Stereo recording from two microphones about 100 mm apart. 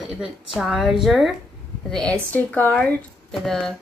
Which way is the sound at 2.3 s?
15° left (ahead or behind).